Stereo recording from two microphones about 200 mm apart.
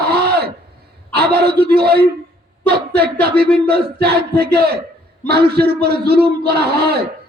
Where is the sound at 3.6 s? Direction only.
50° right (ahead or behind).